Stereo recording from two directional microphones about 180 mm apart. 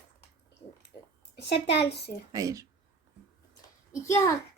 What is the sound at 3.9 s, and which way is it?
Speech, 15° left (ahead or behind).